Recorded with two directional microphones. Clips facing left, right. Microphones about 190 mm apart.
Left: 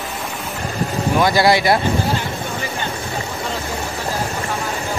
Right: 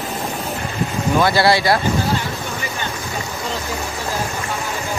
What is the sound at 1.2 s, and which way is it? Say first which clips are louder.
Speech: left 1 dB; 15° left (ahead or behind).